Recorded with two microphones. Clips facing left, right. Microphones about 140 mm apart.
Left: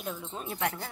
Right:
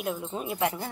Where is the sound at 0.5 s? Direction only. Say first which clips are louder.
Right 4 dB; 20° right (ahead or behind).